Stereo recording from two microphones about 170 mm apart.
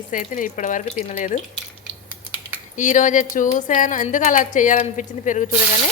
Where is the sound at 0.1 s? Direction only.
50° left (ahead or behind).